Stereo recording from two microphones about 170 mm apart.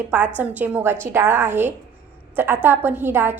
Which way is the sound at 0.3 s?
10° right (ahead or behind).